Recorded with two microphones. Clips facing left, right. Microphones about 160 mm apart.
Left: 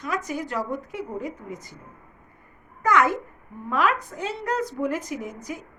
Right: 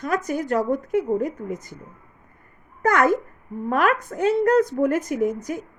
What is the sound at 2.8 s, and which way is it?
A woman's voice, 45° right (ahead or behind).